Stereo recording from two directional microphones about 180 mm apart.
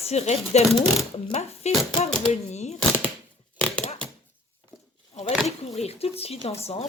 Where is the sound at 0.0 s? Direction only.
35° left (ahead or behind).